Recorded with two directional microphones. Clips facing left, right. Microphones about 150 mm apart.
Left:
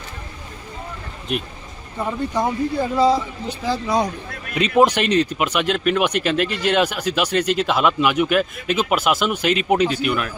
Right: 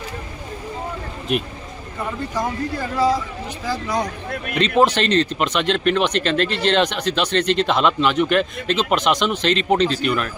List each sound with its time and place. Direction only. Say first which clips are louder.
1.3 s speech: right 3 dB; centre (ahead or behind)
2.0 s speech: left 3 dB; 20° left (ahead or behind)
4.5 s speech: left 1 dB; 10° left (ahead or behind)